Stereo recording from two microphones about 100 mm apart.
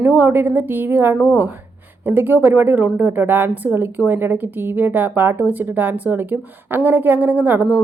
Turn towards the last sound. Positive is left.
turn(degrees=-20)  # may be behind; listen again after turning